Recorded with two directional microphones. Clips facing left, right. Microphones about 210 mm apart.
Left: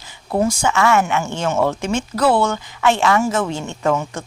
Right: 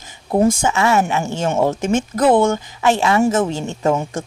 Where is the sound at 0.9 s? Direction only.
35° right (ahead or behind).